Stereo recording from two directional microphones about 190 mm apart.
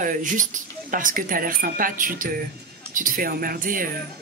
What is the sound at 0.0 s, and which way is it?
Speech, 45° right (ahead or behind).